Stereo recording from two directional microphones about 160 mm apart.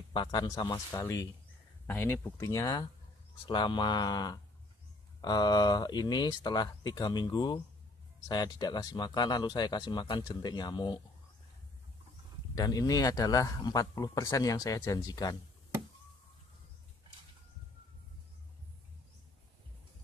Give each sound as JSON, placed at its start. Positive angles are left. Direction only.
{"t": 0.1, "sound": "speech", "side_deg": 25}
{"t": 12.5, "sound": "speech", "side_deg": 25}